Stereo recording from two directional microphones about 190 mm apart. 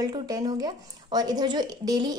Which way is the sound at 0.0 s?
20° right (ahead or behind).